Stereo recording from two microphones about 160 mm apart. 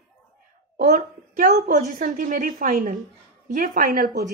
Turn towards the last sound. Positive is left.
turn(degrees=-60)  # may be behind; listen again after turning